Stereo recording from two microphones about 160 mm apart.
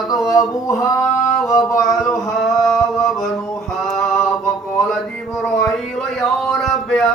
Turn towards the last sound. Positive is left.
turn(degrees=0)  # may be behind; listen again after turning